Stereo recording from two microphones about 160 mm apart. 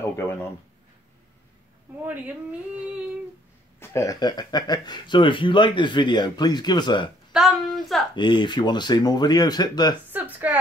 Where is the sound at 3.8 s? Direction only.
20° left (ahead or behind).